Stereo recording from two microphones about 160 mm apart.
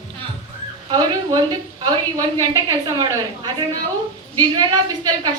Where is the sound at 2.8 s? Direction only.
20° right (ahead or behind).